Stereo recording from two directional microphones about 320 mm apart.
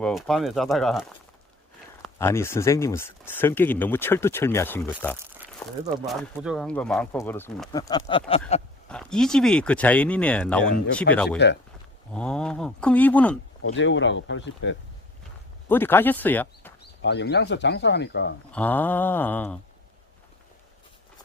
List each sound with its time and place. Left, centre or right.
0.0 s speech: centre
8.3 s a sound: centre
8.9 s speech: centre
13.6 s speech: left
15.7 s speech: centre
16.8 s speech: left
18.5 s speech: centre